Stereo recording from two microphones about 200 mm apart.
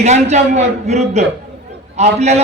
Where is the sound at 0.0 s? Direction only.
35° right (ahead or behind).